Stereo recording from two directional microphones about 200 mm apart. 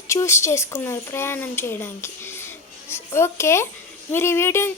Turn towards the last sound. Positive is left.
turn(degrees=10)  # may be behind; listen again after turning